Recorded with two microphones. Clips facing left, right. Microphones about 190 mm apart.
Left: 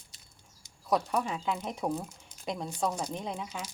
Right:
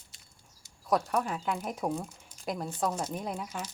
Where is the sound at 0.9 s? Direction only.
Centre (ahead or behind).